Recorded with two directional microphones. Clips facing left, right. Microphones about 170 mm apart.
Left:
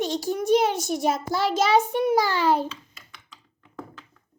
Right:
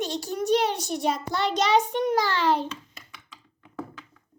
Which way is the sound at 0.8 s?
5° left (ahead or behind).